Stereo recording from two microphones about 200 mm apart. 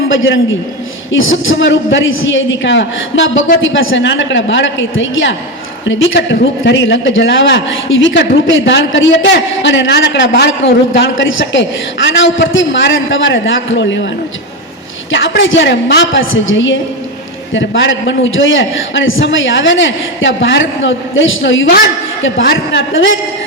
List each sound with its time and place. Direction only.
0.1 s a man's voice: 70° left (ahead or behind)
1.7 s a man's voice: 70° left (ahead or behind)
15.1 s a man's voice: 65° left (ahead or behind)